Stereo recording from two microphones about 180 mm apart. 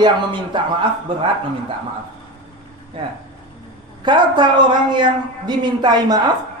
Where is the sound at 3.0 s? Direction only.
30° right (ahead or behind).